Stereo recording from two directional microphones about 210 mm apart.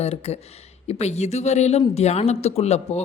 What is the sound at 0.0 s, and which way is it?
A woman's voice, 30° left (ahead or behind).